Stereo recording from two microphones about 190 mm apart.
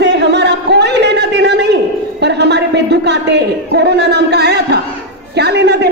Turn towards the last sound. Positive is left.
turn(degrees=-60)  # may be behind; listen again after turning